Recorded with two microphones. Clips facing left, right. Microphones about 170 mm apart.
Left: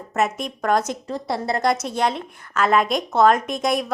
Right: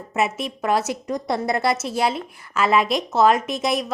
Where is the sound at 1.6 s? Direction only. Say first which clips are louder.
Even; 5° right (ahead or behind).